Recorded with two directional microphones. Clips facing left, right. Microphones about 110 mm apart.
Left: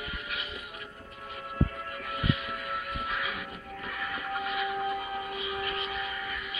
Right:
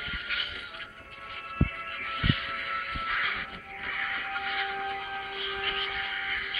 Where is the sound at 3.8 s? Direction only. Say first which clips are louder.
Even; 20° left (ahead or behind).